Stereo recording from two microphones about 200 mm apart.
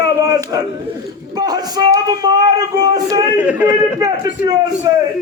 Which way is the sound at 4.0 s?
20° right (ahead or behind).